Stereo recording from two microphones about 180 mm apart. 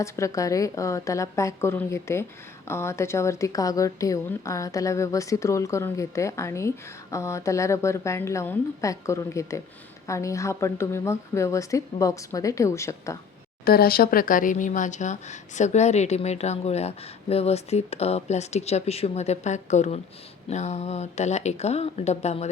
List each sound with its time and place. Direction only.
0.0 s speech: 15° left (ahead or behind)
13.7 s speech: 55° left (ahead or behind); by 22.4 s 35° left (ahead or behind)